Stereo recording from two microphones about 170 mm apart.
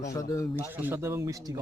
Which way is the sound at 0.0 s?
20° left (ahead or behind).